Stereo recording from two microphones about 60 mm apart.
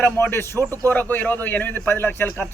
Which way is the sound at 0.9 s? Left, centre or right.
Left.